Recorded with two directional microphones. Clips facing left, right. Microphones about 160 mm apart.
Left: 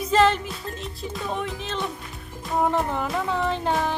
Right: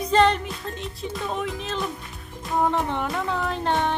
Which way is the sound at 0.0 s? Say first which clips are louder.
Even; 5° left (ahead or behind).